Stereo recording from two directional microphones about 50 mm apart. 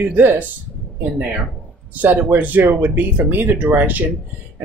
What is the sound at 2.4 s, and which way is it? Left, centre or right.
Speech, right.